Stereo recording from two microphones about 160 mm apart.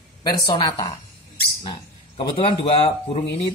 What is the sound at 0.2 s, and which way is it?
A woman's voice, 25° left (ahead or behind).